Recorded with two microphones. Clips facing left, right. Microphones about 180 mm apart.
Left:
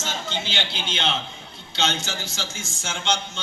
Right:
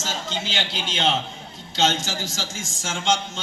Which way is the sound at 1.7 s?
45° right (ahead or behind).